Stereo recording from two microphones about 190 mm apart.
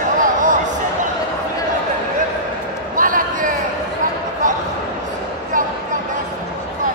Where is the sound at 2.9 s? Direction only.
45° right (ahead or behind).